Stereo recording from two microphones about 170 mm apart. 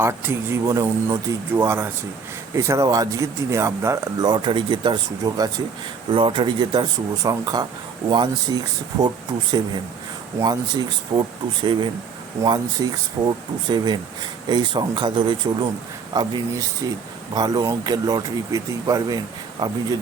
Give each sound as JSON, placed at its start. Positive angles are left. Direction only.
{"t": 0.0, "sound": "speech", "side_deg": -15}